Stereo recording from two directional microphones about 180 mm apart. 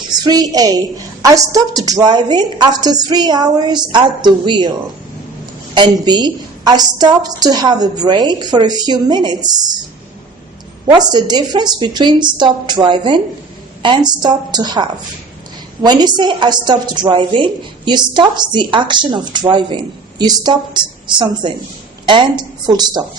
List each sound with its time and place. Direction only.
0.2 s a woman's voice: 20° right (ahead or behind)
5.7 s a woman's voice: 25° right (ahead or behind)
10.8 s a woman's voice: 25° right (ahead or behind)